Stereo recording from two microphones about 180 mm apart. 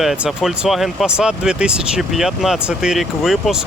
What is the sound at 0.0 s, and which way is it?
Speech, centre (ahead or behind).